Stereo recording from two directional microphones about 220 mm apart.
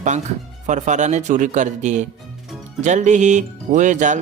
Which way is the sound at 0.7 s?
35° right (ahead or behind).